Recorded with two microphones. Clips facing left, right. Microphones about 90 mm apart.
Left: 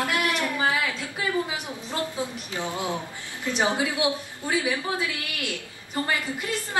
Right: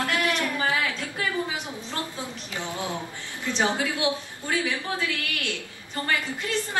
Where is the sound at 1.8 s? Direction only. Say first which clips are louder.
Left 3 dB; 15° left (ahead or behind).